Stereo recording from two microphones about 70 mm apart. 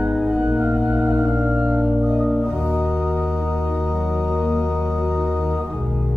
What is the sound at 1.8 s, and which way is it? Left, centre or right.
Organ, centre.